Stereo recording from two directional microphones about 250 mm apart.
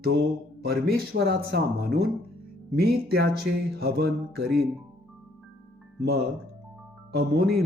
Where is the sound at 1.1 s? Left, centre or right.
Right.